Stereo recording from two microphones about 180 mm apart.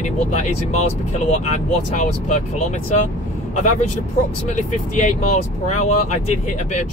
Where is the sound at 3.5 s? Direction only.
40° left (ahead or behind).